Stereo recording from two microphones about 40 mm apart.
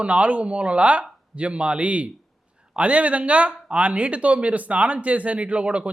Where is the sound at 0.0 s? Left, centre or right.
Right.